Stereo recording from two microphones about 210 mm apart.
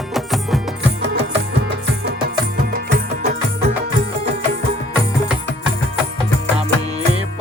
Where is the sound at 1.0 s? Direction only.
55° right (ahead or behind).